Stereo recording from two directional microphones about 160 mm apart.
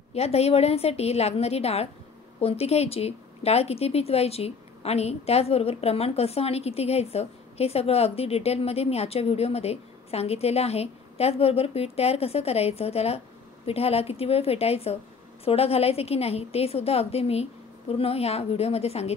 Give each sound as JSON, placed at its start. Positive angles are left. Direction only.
{"t": 0.1, "sound": "speech", "side_deg": 40}